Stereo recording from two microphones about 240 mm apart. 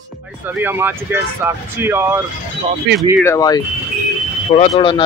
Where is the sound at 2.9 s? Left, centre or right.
Right.